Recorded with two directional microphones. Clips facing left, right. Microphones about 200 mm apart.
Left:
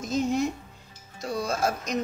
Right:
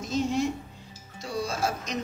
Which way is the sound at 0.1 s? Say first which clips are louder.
Left 1 dB; 45° left (ahead or behind).